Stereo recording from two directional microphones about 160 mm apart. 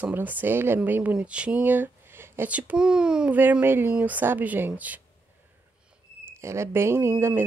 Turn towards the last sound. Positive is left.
turn(degrees=-15)  # may be behind; listen again after turning